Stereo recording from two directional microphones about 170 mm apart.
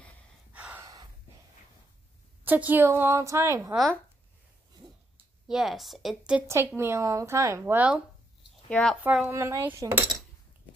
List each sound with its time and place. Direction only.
0.5 s gasp: 10° right (ahead or behind)
2.4 s a woman's voice: 10° right (ahead or behind)
3.7 s a woman's voice: centre (ahead or behind)
5.5 s a woman's voice: centre (ahead or behind)
6.4 s a woman's voice: 15° right (ahead or behind)
8.6 s a woman's voice: 5° left (ahead or behind)
9.0 s a woman's voice: 10° right (ahead or behind)